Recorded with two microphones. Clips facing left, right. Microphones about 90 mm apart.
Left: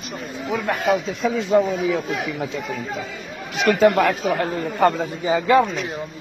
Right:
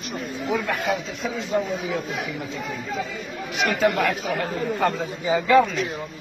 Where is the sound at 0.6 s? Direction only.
45° left (ahead or behind).